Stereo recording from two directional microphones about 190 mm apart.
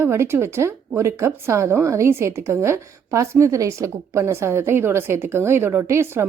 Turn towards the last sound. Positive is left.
turn(degrees=-15)  # may be behind; listen again after turning